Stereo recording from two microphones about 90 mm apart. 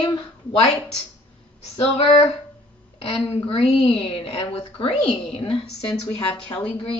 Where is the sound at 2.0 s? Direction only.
90° left.